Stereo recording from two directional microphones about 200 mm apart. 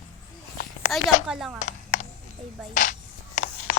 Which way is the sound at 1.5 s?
40° left (ahead or behind).